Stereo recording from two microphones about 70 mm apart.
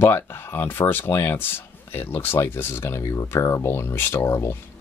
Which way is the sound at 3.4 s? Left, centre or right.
Left.